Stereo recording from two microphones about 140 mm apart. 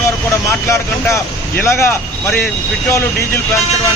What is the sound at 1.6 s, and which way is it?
Speech, 20° left (ahead or behind).